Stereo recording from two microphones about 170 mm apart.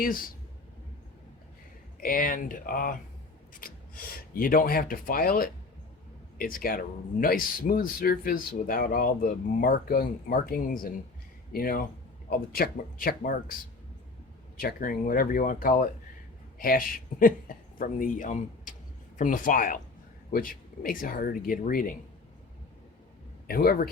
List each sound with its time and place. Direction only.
2.0 s speech: 55° left (ahead or behind)
14.5 s speech: 55° left (ahead or behind)
23.5 s speech: 60° left (ahead or behind)